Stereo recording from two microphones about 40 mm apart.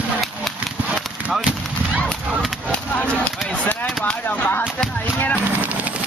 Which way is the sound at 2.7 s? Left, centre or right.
Left.